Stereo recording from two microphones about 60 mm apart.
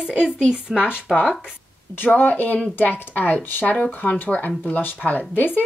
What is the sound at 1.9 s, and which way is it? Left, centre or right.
Speech, left.